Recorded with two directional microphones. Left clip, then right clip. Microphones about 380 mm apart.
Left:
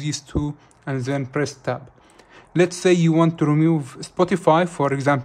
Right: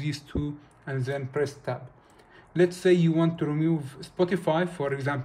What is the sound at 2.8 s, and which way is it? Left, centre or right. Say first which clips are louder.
Speech: left 5 dB; centre.